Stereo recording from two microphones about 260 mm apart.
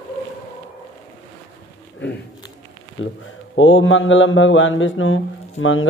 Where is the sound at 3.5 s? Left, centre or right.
Left.